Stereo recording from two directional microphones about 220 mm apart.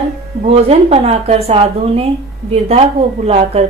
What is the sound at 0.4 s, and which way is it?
A woman's voice, 25° right (ahead or behind).